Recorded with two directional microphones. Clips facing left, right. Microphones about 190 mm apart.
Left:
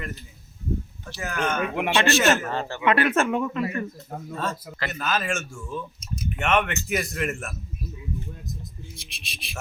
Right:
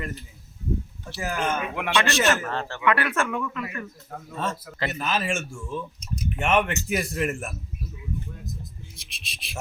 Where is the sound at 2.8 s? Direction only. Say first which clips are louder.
Left 3 dB; 20° left (ahead or behind).